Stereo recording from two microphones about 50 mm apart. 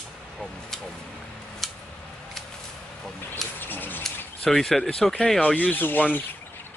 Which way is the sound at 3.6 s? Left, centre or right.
Left.